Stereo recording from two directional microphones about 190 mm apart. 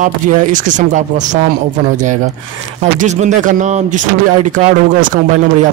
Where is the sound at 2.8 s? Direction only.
35° right (ahead or behind).